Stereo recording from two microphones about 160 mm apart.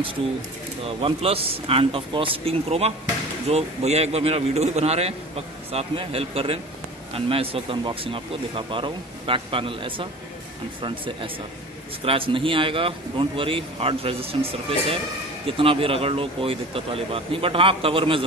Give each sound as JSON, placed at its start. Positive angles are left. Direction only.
{"t": 0.8, "sound": "a man's voice", "side_deg": -35}
{"t": 12.0, "sound": "a man's voice", "side_deg": -35}